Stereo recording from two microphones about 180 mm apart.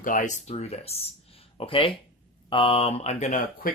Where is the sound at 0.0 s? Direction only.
45° left (ahead or behind).